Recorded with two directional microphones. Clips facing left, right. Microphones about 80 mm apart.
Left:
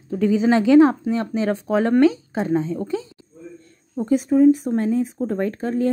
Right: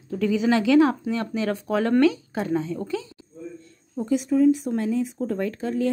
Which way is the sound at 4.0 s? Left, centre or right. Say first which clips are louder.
Left 4 dB; left.